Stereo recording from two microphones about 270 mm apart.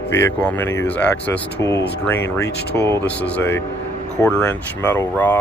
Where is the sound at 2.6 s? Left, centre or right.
Left.